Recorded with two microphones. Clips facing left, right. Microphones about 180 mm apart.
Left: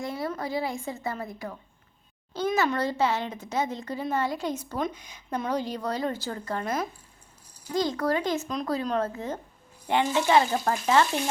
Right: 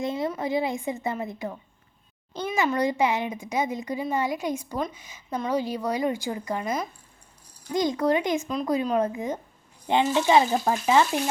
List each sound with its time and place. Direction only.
0.0 s a woman's voice: 20° right (ahead or behind)
2.5 s a child's voice: 5° right (ahead or behind)